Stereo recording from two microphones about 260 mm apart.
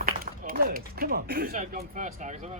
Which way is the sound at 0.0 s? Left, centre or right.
Right.